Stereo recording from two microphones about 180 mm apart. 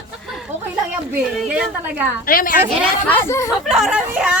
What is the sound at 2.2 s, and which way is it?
Speech, 50° left (ahead or behind).